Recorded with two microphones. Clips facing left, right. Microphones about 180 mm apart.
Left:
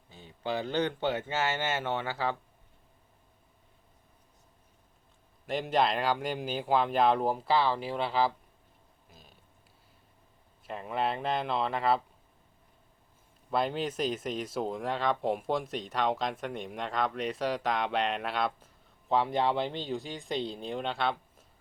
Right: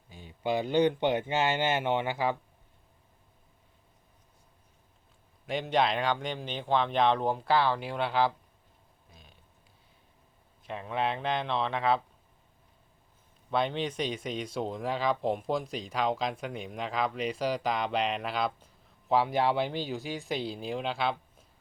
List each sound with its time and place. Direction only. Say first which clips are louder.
0.1 s speech: right 3 dB; 10° right (ahead or behind)
5.5 s speech: even; centre (ahead or behind)
9.0 s a sound: left 1 dB; centre (ahead or behind)
10.7 s speech: even; centre (ahead or behind)
13.5 s speech: even; centre (ahead or behind)